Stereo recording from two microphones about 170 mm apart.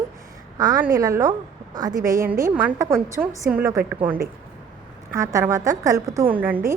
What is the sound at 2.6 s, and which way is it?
A woman's voice, 15° right (ahead or behind).